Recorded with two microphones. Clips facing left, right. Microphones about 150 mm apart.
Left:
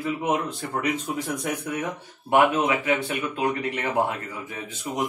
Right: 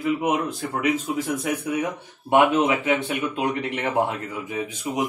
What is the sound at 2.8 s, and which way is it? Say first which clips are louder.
Speech: right 2 dB; 20° right (ahead or behind).